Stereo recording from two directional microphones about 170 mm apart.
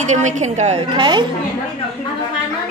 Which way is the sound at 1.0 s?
25° right (ahead or behind).